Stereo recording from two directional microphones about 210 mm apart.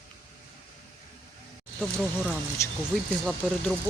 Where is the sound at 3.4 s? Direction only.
Centre (ahead or behind).